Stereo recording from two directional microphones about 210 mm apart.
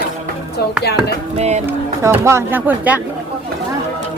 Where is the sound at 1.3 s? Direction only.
30° right (ahead or behind).